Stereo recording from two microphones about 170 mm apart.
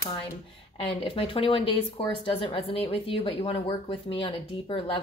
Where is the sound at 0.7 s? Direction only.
35° left (ahead or behind).